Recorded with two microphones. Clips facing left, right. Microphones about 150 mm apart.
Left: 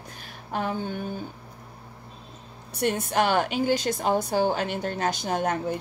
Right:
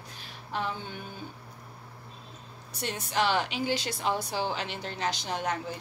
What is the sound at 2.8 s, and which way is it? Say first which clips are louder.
A woman's voice: left 5 dB; 55° left (ahead or behind).